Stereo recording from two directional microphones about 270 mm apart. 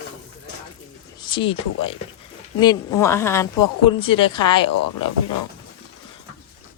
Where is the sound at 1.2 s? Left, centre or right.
Centre.